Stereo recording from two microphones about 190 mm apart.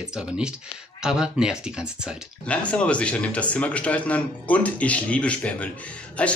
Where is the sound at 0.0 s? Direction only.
5° right (ahead or behind).